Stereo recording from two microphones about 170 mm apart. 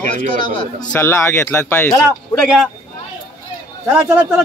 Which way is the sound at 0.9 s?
15° left (ahead or behind).